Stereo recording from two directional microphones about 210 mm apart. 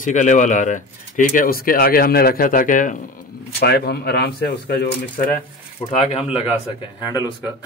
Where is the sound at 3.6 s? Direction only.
50° left (ahead or behind).